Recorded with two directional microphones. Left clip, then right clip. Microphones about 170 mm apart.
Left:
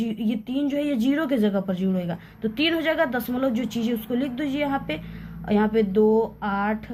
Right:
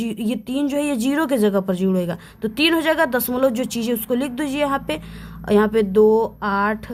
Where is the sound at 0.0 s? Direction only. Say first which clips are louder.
Right 3 dB; 45° right (ahead or behind).